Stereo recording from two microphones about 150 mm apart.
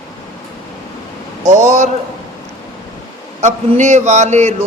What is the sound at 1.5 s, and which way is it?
Speech, 50° right (ahead or behind).